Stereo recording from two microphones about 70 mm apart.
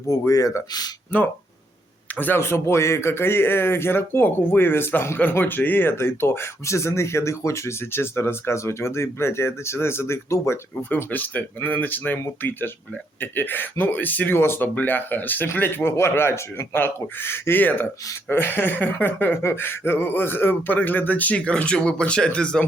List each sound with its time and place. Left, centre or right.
0.1 s speech: left
2.1 s a man's voice: left
10.8 s a man's voice: left